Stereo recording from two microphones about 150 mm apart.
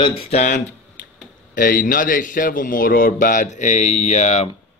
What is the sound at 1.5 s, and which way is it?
Speech, 70° left (ahead or behind).